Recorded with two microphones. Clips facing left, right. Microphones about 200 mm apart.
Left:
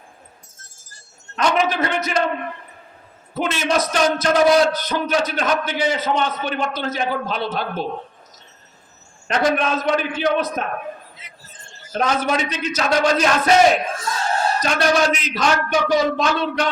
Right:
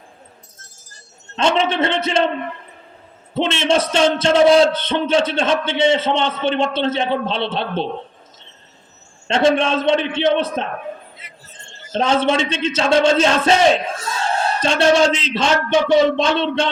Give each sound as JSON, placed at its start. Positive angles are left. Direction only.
{"t": 1.4, "sound": "a man's voice", "side_deg": -25}
{"t": 3.3, "sound": "a man's voice", "side_deg": -25}
{"t": 9.2, "sound": "a man's voice", "side_deg": -25}